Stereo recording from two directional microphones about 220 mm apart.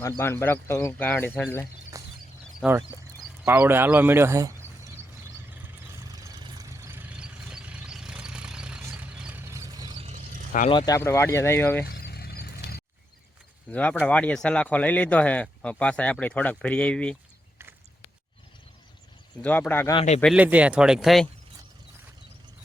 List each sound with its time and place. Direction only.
0.0 s speech: 10° left (ahead or behind)
2.0 s a sound: 15° right (ahead or behind)
2.6 s speech: 10° right (ahead or behind)
5.6 s vehicle: 15° right (ahead or behind)
10.7 s speech: 20° left (ahead or behind)
11.9 s a sound: 45° left (ahead or behind)
13.7 s speech: 5° left (ahead or behind)
19.4 s speech: 5° left (ahead or behind)
20.0 s speech: 25° left (ahead or behind)
20.2 s speech: 5° right (ahead or behind)